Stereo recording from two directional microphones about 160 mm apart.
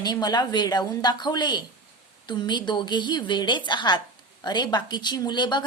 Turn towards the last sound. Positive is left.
turn(degrees=30)  # may be behind; listen again after turning